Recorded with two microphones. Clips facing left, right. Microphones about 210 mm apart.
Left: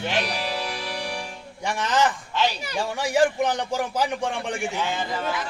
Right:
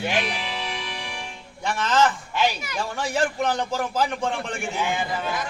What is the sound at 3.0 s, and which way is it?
Speech, 15° left (ahead or behind).